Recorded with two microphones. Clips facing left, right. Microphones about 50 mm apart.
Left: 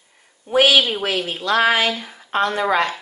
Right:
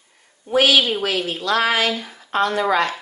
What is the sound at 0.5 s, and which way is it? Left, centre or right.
Speech, left.